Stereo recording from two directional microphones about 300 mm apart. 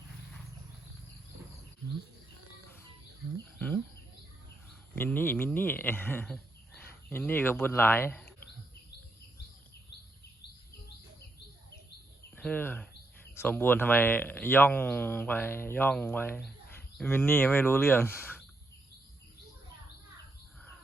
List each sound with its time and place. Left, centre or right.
4.9 s speech: centre
12.4 s speech: centre